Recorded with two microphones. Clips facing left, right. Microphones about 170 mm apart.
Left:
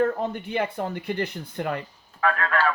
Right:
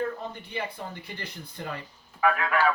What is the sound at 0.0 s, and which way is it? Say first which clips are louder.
Speech: left 8 dB; 60° left (ahead or behind).